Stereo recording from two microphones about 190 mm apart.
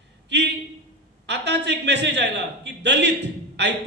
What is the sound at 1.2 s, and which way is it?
A man's voice, 65° right (ahead or behind).